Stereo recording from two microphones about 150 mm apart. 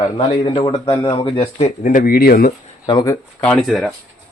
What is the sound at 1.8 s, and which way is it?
Speech, 60° left (ahead or behind).